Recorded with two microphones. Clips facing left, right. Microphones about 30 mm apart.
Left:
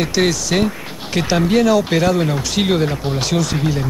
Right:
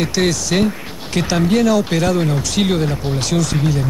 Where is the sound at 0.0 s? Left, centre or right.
Centre.